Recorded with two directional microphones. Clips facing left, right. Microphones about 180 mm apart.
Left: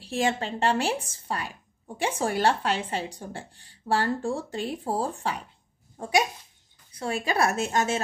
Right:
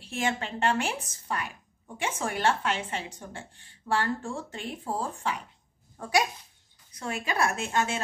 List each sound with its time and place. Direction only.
0.0 s a woman's voice: 35° left (ahead or behind)
5.9 s a woman's voice: 25° left (ahead or behind); by 8.0 s 40° left (ahead or behind)